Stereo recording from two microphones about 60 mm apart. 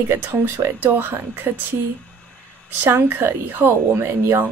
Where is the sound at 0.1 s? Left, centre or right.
Right.